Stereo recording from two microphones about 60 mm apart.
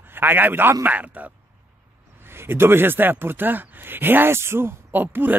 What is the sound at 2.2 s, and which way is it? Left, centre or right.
Speech, right.